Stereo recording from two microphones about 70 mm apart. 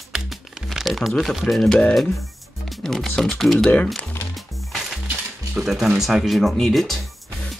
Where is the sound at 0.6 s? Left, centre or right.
Centre.